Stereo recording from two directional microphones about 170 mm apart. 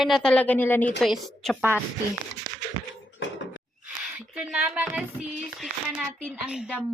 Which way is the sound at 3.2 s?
90° left.